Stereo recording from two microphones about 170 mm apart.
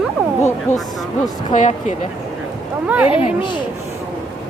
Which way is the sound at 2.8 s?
10° right (ahead or behind).